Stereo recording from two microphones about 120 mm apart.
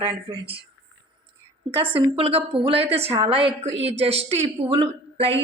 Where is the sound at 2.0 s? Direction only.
50° right (ahead or behind).